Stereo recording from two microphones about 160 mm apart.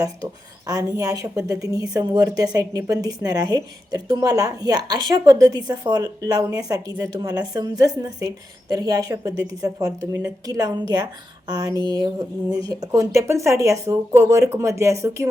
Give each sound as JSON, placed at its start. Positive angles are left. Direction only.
{"t": 0.7, "sound": "a woman's voice", "side_deg": -20}